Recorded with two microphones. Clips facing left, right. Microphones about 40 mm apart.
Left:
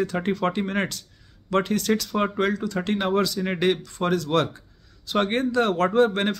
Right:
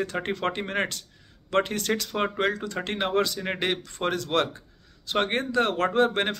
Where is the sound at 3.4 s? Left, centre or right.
Right.